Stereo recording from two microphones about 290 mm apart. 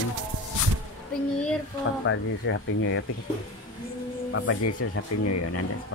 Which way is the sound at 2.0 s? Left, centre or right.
Left.